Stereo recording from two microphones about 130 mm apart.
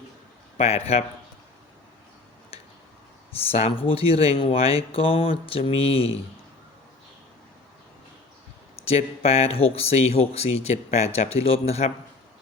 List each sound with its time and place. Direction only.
0.5 s speech: 55° left (ahead or behind)
3.3 s speech: 50° left (ahead or behind)
8.8 s speech: 55° left (ahead or behind)